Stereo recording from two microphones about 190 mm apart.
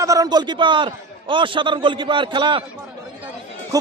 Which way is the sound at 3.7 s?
20° right (ahead or behind).